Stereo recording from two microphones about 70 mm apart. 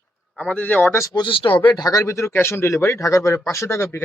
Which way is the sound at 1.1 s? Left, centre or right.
Left.